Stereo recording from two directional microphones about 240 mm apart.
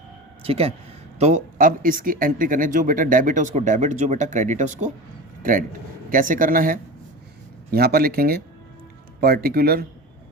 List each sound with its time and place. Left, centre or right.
0.4 s a man's voice: right